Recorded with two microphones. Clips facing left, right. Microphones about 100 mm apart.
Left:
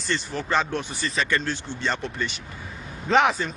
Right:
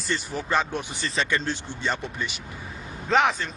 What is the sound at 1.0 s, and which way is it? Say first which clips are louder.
Speech: even; 30° right (ahead or behind).